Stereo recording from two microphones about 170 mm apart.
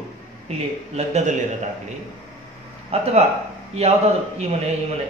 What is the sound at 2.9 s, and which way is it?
A man's voice, 35° right (ahead or behind).